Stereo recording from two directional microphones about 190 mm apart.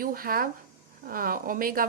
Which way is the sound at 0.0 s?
50° right (ahead or behind).